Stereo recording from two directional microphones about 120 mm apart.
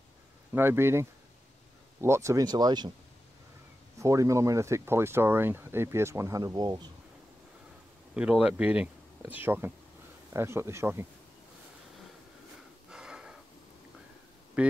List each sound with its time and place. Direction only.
0.5 s speech: 20° right (ahead or behind); by 2.9 s 35° right (ahead or behind)
4.0 s speech: 25° right (ahead or behind)
8.1 s speech: 10° right (ahead or behind)
12.9 s a sound: 5° right (ahead or behind)
14.6 s speech: 10° right (ahead or behind)